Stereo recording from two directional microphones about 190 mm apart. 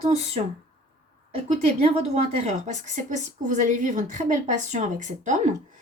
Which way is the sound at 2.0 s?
35° right (ahead or behind).